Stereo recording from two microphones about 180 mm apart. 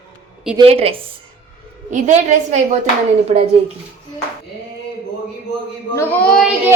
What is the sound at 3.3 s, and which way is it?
Speech, 35° right (ahead or behind).